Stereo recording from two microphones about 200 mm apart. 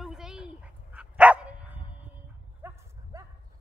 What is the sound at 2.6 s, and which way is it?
Dog, 15° right (ahead or behind).